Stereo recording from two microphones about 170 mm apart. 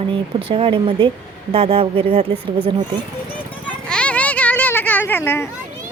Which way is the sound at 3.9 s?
5° left (ahead or behind).